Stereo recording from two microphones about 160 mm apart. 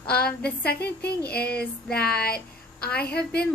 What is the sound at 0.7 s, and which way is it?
A woman's voice, 90° left.